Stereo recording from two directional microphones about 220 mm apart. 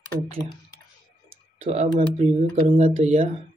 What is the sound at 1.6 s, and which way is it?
Speech, 30° right (ahead or behind).